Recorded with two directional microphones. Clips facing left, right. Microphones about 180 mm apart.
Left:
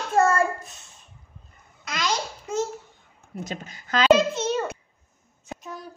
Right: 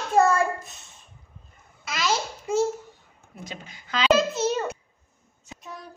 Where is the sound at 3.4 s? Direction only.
45° left (ahead or behind).